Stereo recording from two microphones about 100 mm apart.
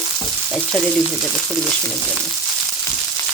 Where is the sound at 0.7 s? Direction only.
Centre (ahead or behind).